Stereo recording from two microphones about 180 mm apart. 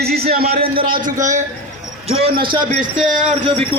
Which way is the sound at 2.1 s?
30° right (ahead or behind).